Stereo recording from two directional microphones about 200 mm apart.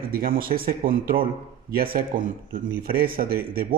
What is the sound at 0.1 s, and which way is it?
Speech, 45° right (ahead or behind).